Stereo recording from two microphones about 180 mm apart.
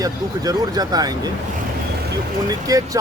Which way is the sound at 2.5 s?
20° right (ahead or behind).